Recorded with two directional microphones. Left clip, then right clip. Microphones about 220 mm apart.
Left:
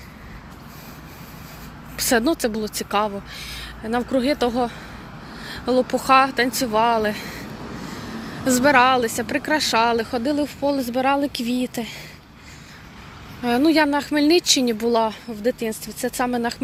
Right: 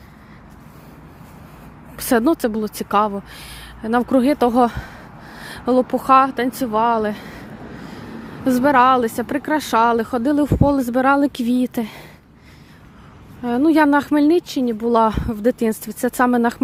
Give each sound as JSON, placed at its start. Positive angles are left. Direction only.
{"t": 2.0, "sound": "speech", "side_deg": -25}
{"t": 8.4, "sound": "speech", "side_deg": -25}
{"t": 13.4, "sound": "speech", "side_deg": -20}
{"t": 14.9, "sound": "speech", "side_deg": -35}